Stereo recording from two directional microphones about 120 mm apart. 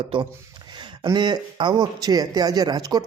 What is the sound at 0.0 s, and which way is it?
Speech, 45° right (ahead or behind).